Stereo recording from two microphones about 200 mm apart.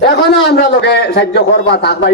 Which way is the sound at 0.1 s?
55° left (ahead or behind).